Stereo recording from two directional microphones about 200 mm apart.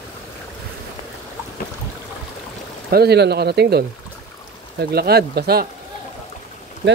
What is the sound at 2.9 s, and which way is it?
Speech, 55° right (ahead or behind).